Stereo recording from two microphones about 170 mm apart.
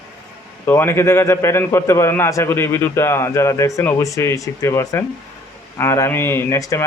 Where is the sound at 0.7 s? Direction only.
15° left (ahead or behind).